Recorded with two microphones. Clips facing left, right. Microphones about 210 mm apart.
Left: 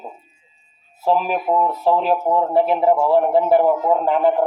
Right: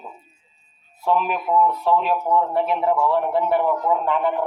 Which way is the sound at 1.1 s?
35° left (ahead or behind).